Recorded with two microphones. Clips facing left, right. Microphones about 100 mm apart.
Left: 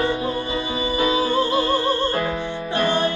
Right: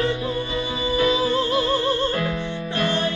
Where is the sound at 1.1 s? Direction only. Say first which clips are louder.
Left 1 dB; 45° left (ahead or behind).